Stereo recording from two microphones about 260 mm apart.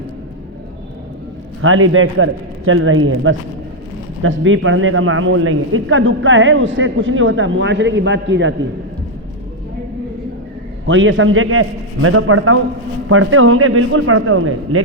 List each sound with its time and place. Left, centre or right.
1.6 s a man's voice: right
10.8 s a man's voice: right